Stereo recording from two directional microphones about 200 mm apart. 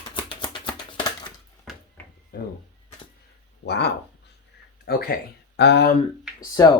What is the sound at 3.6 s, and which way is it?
Speech, 55° left (ahead or behind).